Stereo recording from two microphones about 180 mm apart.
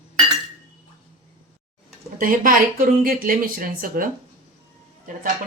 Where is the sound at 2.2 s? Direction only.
50° right (ahead or behind).